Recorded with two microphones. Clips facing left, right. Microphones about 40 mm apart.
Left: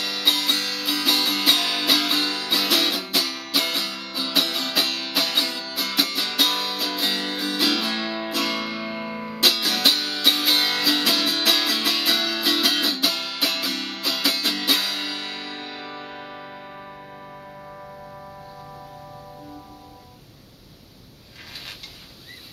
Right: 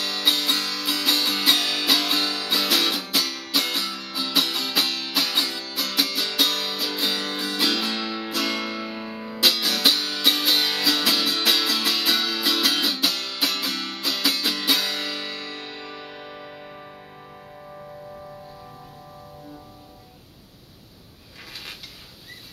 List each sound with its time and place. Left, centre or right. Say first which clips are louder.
0.0 s music: even; centre